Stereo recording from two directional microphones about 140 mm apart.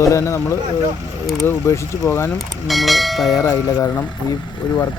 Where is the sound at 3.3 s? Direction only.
25° left (ahead or behind).